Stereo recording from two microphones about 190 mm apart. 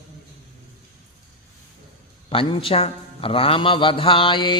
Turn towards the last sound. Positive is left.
turn(degrees=25)  # may be behind; listen again after turning